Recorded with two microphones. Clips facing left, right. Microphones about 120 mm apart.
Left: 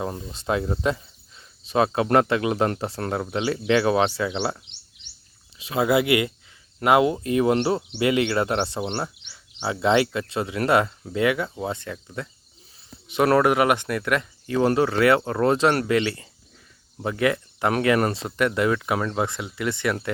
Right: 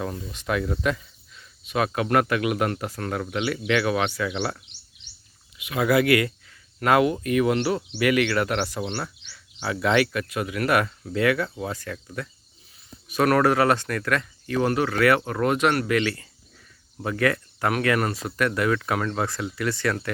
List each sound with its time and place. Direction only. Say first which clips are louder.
0.0 s speech: left 1 dB; 30° left (ahead or behind)